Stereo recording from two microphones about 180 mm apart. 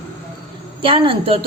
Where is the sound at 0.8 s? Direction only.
30° right (ahead or behind).